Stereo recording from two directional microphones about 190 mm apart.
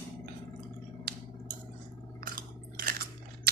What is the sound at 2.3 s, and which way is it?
Chewing, 50° right (ahead or behind).